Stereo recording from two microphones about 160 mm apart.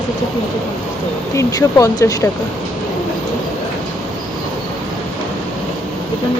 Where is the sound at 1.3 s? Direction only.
20° left (ahead or behind).